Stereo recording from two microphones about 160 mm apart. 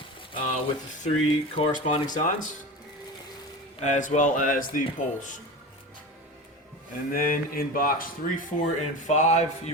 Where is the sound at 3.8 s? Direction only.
50° left (ahead or behind).